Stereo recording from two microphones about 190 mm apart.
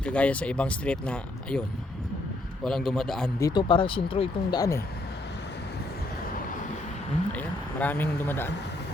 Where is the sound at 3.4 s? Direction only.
25° left (ahead or behind).